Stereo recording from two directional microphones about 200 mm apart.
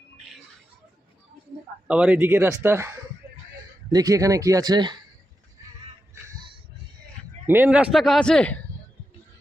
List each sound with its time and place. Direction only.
1.9 s speech: 5° right (ahead or behind)
3.9 s speech: 15° right (ahead or behind)
7.4 s a man's voice: 10° right (ahead or behind)